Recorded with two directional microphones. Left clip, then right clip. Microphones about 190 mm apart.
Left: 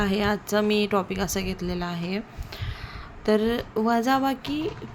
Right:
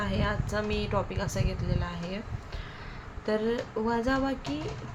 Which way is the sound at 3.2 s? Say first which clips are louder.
Left 6 dB; 70° left (ahead or behind).